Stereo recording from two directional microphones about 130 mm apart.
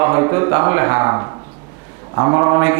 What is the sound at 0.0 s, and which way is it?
Speech, 25° right (ahead or behind).